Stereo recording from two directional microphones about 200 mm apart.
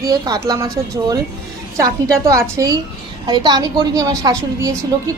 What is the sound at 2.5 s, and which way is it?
A woman's voice, 20° right (ahead or behind).